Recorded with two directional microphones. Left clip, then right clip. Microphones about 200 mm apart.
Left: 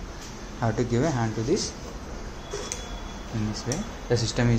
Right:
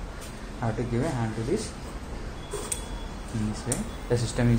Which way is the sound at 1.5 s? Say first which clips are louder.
Left 3 dB; 40° left (ahead or behind).